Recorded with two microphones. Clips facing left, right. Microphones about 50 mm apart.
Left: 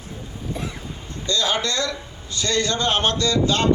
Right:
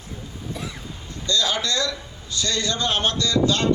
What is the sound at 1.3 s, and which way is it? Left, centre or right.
A man's voice, left.